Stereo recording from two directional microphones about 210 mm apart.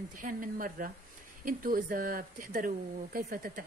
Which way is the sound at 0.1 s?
40° right (ahead or behind).